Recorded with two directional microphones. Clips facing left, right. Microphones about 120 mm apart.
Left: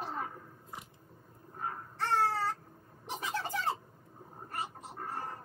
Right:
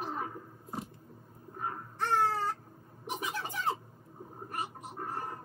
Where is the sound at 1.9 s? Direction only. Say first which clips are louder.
Right 1 dB; 15° right (ahead or behind).